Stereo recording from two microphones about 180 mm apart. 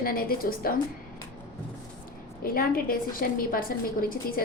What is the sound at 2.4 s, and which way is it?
A woman's voice, 55° left (ahead or behind).